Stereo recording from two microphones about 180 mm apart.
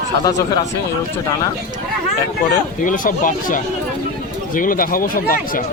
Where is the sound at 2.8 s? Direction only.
50° left (ahead or behind).